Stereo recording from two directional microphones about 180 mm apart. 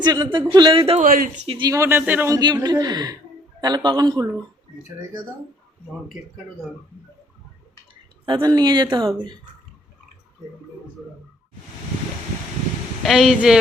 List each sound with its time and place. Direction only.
0.0 s speech: 25° right (ahead or behind)
1.0 s speech: 50° right (ahead or behind)
1.5 s speech: 25° right (ahead or behind)
8.2 s speech: 25° right (ahead or behind)
13.0 s speech: centre (ahead or behind)